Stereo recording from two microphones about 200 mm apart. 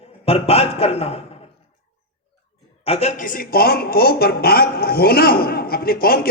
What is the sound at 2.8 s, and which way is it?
A man's voice, 30° left (ahead or behind).